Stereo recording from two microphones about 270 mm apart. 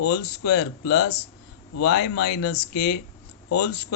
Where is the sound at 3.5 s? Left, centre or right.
Left.